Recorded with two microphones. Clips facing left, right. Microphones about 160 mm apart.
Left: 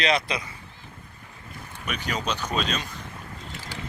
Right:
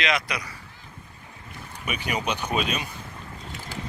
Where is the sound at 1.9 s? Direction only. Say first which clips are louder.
Right 1 dB; 10° right (ahead or behind).